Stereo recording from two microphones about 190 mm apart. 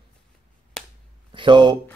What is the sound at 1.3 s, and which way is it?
Speech, 25° right (ahead or behind).